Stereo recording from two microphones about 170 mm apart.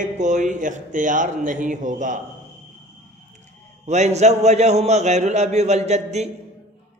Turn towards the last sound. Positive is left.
turn(degrees=-40)  # may be behind; listen again after turning